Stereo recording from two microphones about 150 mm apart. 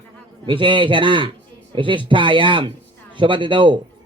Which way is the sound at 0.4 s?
35° right (ahead or behind).